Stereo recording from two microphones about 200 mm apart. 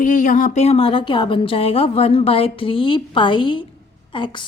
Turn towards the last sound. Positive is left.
turn(degrees=25)  # may be behind; listen again after turning